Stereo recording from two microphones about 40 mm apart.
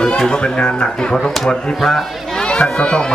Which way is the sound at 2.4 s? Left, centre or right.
Left.